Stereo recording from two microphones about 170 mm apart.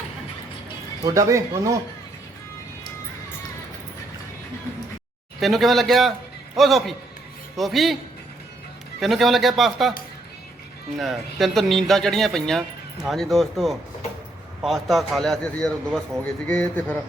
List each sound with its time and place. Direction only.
1.0 s speech: 20° right (ahead or behind)
5.4 s speech: centre (ahead or behind)
9.0 s speech: centre (ahead or behind)
10.9 s speech: centre (ahead or behind)